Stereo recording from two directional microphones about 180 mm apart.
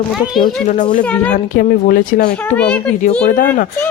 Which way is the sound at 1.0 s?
5° left (ahead or behind).